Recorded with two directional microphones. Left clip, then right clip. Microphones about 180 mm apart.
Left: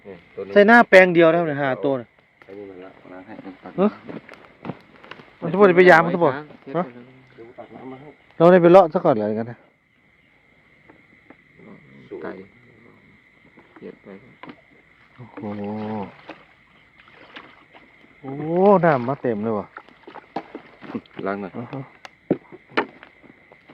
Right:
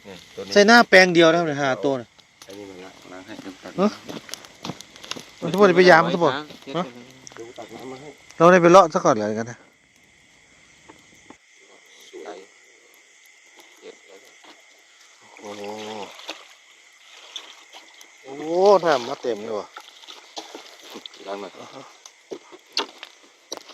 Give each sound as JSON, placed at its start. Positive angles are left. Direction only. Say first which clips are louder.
{"t": 0.0, "sound": "speech", "louder": "left 2 dB", "side_deg": 40}
{"t": 0.5, "sound": "speech", "louder": "left 1 dB", "side_deg": 5}
{"t": 3.1, "sound": "a sound", "louder": "right 1 dB", "side_deg": 45}
{"t": 4.0, "sound": "a sound", "louder": "right 2 dB", "side_deg": 35}
{"t": 5.4, "sound": "speech", "louder": "left 2 dB", "side_deg": 0}
{"t": 6.3, "sound": "speech", "louder": "right 2 dB", "side_deg": 55}
{"t": 8.4, "sound": "speech", "louder": "left 1 dB", "side_deg": 15}
{"t": 16.0, "sound": "boat", "louder": "right 4 dB", "side_deg": -60}
{"t": 18.4, "sound": "speech", "louder": "left 1 dB", "side_deg": -10}